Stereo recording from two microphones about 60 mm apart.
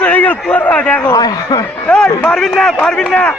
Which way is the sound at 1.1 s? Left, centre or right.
Left.